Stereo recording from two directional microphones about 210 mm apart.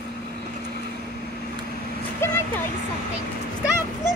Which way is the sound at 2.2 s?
10° left (ahead or behind).